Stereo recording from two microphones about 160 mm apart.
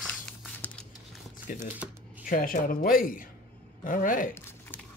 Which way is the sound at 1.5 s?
65° left (ahead or behind).